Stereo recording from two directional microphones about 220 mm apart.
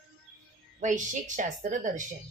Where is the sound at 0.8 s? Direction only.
35° right (ahead or behind).